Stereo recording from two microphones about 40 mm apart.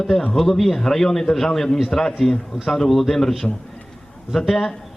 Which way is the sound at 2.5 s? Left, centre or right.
Centre.